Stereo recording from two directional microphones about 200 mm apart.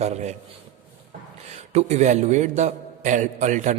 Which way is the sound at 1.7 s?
35° right (ahead or behind).